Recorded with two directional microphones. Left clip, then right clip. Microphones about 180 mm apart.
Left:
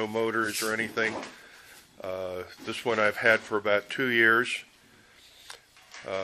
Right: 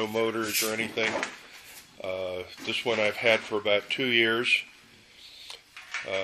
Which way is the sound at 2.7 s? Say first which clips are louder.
Left 1 dB; 60° left (ahead or behind).